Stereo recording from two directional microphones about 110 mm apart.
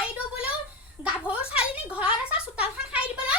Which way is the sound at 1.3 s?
10° right (ahead or behind).